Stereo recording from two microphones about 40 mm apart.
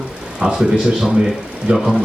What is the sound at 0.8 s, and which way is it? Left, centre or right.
Speech, centre.